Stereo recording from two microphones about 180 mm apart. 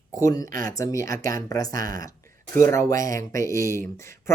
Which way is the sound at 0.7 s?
15° left (ahead or behind).